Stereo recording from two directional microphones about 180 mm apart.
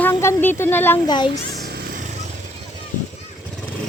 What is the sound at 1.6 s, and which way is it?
Vehicle, 60° right (ahead or behind).